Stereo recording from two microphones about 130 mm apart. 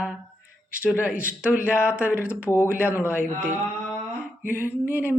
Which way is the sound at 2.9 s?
20° left (ahead or behind).